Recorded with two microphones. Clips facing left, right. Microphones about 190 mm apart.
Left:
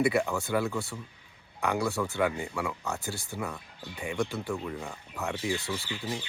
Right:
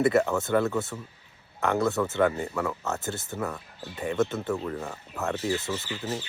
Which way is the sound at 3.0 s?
20° right (ahead or behind).